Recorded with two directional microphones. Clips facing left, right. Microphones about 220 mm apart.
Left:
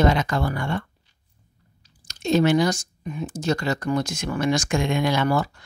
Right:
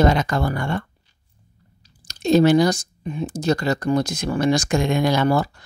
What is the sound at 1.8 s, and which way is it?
Speech, 35° right (ahead or behind).